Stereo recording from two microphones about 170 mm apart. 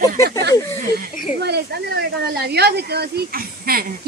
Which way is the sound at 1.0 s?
75° right (ahead or behind).